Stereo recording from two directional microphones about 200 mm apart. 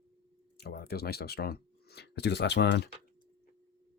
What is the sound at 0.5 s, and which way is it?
Speech, 50° left (ahead or behind).